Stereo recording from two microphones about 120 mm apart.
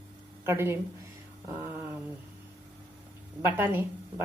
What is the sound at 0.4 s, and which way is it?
Speech, 20° right (ahead or behind).